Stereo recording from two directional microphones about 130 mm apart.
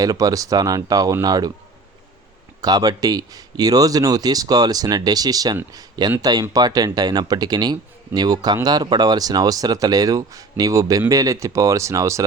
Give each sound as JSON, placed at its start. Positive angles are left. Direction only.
{"t": 0.0, "sound": "speech", "side_deg": -25}
{"t": 2.6, "sound": "speech", "side_deg": -30}